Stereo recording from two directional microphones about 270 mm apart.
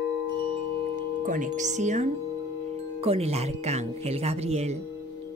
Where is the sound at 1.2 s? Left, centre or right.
Right.